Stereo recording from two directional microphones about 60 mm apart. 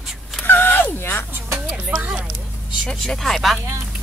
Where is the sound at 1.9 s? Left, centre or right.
Right.